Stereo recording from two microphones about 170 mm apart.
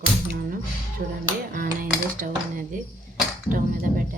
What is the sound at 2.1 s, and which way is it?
Speech, 55° right (ahead or behind).